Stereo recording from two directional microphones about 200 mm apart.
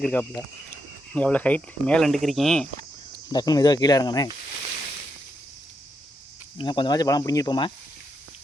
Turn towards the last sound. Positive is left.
turn(degrees=20)  # may be behind; listen again after turning